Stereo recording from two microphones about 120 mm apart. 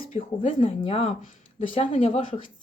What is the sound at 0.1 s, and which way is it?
A woman's voice, 50° left (ahead or behind).